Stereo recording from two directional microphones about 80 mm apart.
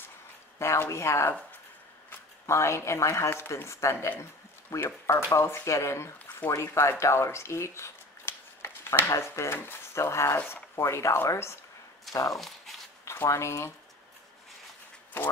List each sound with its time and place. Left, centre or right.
0.6 s speech: left
2.4 s speech: left
10.3 s speech: left
10.8 s speech: left
12.1 s speech: left
12.4 s a sound: centre
13.0 s speech: left